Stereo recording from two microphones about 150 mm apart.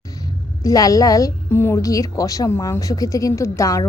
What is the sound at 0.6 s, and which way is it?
A woman's voice, 25° left (ahead or behind).